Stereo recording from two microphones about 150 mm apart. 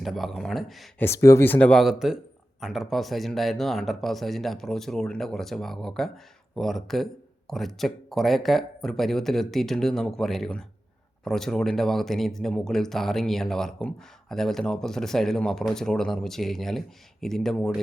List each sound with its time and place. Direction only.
0.0 s speech: centre (ahead or behind)
0.9 s speech: 15° left (ahead or behind)